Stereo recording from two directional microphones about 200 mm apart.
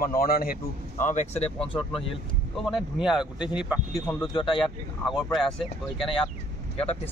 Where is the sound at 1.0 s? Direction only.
35° left (ahead or behind).